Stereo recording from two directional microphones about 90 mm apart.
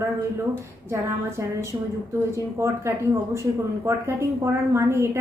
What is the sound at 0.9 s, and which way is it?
A woman's voice, 30° right (ahead or behind).